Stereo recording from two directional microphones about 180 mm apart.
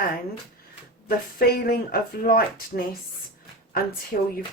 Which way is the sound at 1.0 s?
55° left (ahead or behind).